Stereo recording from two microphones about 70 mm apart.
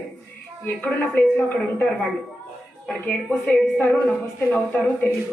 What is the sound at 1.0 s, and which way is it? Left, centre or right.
A woman's voice, left.